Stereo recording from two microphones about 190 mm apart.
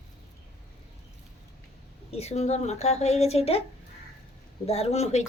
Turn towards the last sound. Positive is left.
turn(degrees=35)  # may be behind; listen again after turning